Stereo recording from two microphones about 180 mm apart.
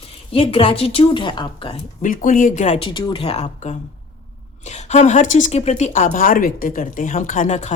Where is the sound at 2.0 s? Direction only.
45° left (ahead or behind).